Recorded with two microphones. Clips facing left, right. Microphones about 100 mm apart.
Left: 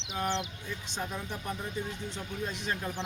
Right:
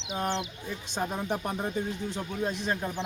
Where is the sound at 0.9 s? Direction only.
50° right (ahead or behind).